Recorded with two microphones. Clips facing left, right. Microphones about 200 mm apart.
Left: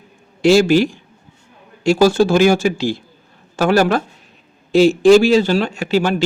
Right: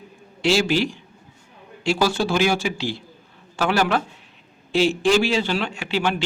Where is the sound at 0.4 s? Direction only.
45° left (ahead or behind).